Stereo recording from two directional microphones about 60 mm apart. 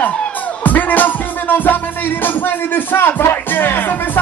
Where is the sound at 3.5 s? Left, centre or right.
Left.